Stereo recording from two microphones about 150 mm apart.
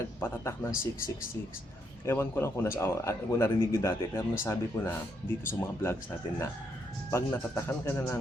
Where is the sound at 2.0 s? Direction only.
15° left (ahead or behind).